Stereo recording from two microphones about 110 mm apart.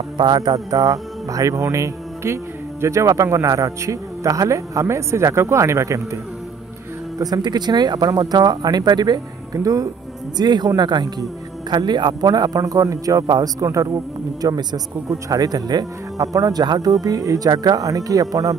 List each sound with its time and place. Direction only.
0.2 s speech: 40° right (ahead or behind)
7.2 s speech: 35° right (ahead or behind)